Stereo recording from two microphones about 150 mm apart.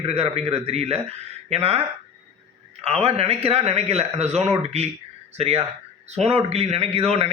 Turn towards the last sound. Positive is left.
turn(degrees=-45)  # may be behind; listen again after turning